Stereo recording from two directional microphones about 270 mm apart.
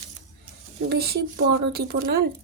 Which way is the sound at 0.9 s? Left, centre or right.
Right.